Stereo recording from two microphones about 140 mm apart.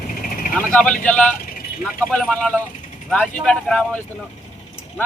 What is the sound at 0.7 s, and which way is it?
Speech, 10° left (ahead or behind).